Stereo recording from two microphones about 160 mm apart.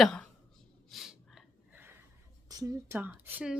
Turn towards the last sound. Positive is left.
turn(degrees=-10)  # may be behind; listen again after turning